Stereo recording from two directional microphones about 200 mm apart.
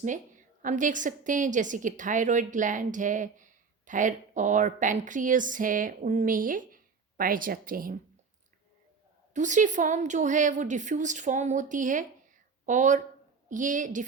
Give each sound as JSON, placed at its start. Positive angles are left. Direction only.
{"t": 0.0, "sound": "a woman's voice", "side_deg": -40}
{"t": 9.3, "sound": "a woman's voice", "side_deg": -40}